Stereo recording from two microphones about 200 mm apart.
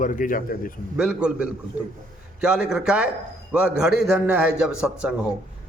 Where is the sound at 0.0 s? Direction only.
45° left (ahead or behind).